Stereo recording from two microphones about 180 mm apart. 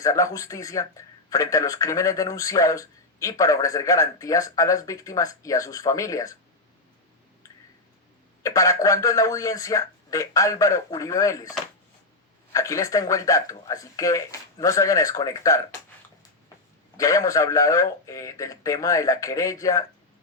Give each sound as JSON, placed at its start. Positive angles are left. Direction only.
{"t": 0.0, "sound": "speech", "side_deg": 20}
{"t": 8.4, "sound": "speech", "side_deg": 20}
{"t": 12.5, "sound": "speech", "side_deg": 15}
{"t": 17.0, "sound": "speech", "side_deg": 20}